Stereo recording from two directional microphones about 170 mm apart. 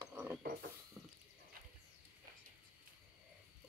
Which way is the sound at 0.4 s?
65° right (ahead or behind).